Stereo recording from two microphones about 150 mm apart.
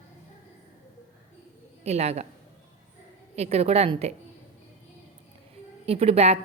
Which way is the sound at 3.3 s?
45° right (ahead or behind).